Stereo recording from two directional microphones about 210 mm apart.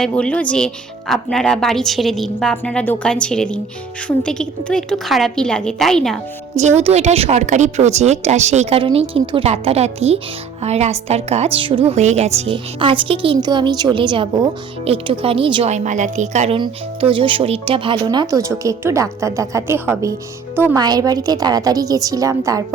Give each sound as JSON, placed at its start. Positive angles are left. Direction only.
{"t": 0.0, "sound": "speech", "side_deg": 5}
{"t": 6.6, "sound": "a woman's voice", "side_deg": -30}